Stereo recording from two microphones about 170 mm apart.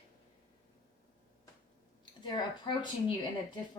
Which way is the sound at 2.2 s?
25° left (ahead or behind).